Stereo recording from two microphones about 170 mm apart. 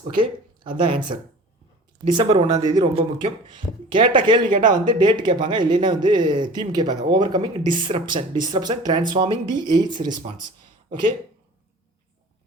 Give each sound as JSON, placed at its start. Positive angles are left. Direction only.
{"t": 0.1, "sound": "a sound", "side_deg": -30}
{"t": 0.8, "sound": "speech", "side_deg": -30}
{"t": 4.4, "sound": "speech", "side_deg": -55}
{"t": 4.9, "sound": "speech", "side_deg": -25}